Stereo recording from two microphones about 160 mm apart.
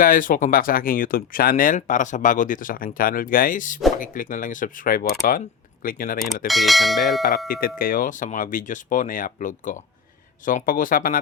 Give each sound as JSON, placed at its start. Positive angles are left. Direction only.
{"t": 0.0, "sound": "speech", "side_deg": 60}
{"t": 6.5, "sound": "speech", "side_deg": 0}
{"t": 7.2, "sound": "speech", "side_deg": 65}